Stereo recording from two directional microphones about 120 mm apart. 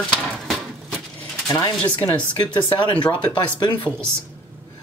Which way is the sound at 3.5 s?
40° left (ahead or behind).